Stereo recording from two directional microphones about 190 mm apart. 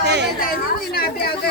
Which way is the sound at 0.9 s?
55° left (ahead or behind).